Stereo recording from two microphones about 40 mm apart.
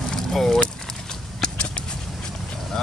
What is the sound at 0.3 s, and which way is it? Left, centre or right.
Vehicle, centre.